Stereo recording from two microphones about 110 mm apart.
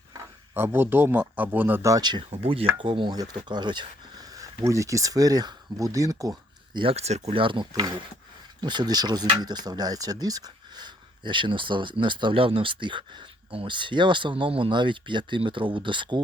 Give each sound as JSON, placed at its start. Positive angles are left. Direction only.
{"t": 0.5, "sound": "a man's voice", "side_deg": -20}
{"t": 1.9, "sound": "speech", "side_deg": -40}
{"t": 2.3, "sound": "speech", "side_deg": -60}
{"t": 2.7, "sound": "speech", "side_deg": -50}
{"t": 6.9, "sound": "speech", "side_deg": -75}
{"t": 7.3, "sound": "speech", "side_deg": -50}